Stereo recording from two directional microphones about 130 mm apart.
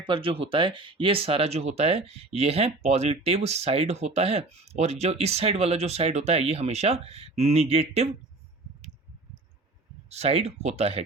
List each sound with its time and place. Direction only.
0.0 s speech: 40° right (ahead or behind)
10.1 s speech: 55° right (ahead or behind)